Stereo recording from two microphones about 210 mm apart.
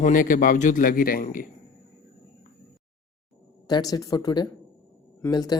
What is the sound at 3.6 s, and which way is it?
Speech, 20° left (ahead or behind).